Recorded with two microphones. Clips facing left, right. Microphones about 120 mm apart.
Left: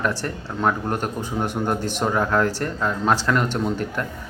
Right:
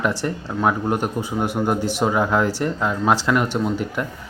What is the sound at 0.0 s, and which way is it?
Speech, 15° right (ahead or behind).